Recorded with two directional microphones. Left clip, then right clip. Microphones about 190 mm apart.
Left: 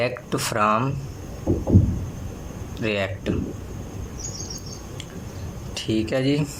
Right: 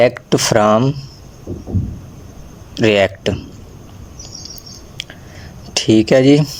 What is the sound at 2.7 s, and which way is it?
Speech, 40° right (ahead or behind).